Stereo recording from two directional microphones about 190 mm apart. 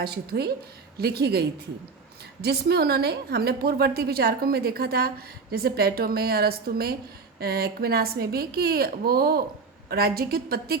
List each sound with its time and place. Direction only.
0.0 s a woman's voice: 55° right (ahead or behind)